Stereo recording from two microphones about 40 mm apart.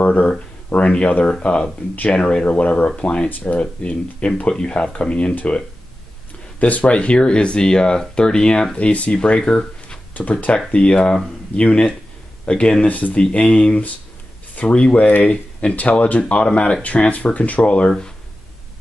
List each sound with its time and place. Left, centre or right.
0.0 s speech: left
3.3 s speech: left
3.5 s speech: left
6.6 s speech: left
8.7 s speech: left
9.4 s speech: centre
10.7 s speech: left
12.8 s speech: left
13.2 s speech: left
15.2 s speech: left